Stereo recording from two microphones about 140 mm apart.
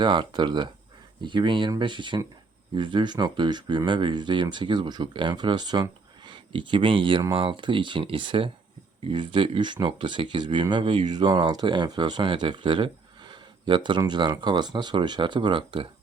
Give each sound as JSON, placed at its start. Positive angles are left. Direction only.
{"t": 0.0, "sound": "speech", "side_deg": -35}